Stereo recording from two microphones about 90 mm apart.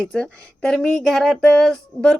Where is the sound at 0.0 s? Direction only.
10° left (ahead or behind).